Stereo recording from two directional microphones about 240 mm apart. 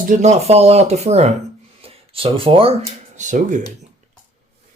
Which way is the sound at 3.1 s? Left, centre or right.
Right.